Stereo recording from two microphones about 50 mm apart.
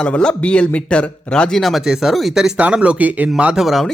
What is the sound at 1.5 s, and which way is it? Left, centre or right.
Speech, centre.